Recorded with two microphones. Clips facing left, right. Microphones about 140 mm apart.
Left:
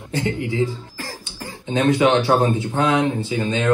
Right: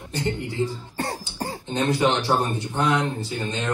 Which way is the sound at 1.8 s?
90° left.